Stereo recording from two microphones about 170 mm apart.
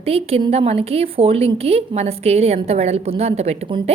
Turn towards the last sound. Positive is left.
turn(degrees=-35)  # may be behind; listen again after turning